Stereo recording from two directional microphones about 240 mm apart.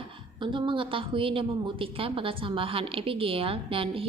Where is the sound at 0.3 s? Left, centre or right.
Centre.